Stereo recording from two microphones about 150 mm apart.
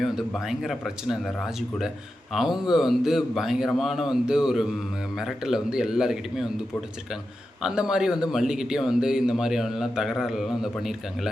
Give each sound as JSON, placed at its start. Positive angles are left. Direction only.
{"t": 0.0, "sound": "a man's voice", "side_deg": 0}
{"t": 7.6, "sound": "a man's voice", "side_deg": -5}